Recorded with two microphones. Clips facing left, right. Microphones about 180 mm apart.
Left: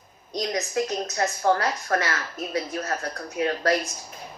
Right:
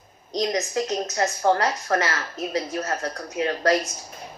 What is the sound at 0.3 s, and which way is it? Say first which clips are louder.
A woman's voice: right 2 dB; 30° right (ahead or behind).